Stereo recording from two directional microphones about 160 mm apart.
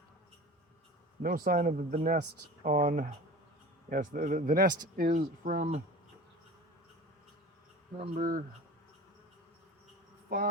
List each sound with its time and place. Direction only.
1.2 s speech: 65° right (ahead or behind)
7.9 s speech: 50° right (ahead or behind)
10.2 s speech: 65° right (ahead or behind)